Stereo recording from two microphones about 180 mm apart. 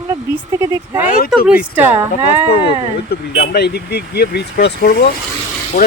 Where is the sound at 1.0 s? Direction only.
50° left (ahead or behind).